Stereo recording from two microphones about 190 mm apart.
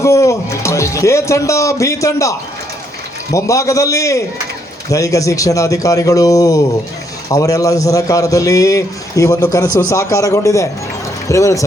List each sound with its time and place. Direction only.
0.0 s speech: 15° left (ahead or behind)
3.3 s a man's voice: 15° left (ahead or behind)